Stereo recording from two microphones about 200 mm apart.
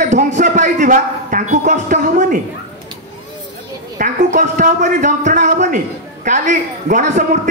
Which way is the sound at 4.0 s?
40° right (ahead or behind).